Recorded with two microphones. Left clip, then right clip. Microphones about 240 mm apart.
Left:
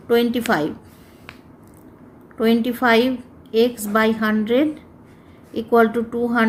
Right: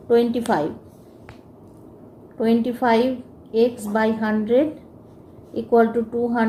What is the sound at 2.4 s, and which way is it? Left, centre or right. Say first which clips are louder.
A woman's voice: left 2 dB; left.